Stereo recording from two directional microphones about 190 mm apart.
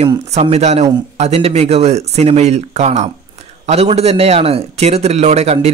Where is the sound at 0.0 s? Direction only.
30° right (ahead or behind).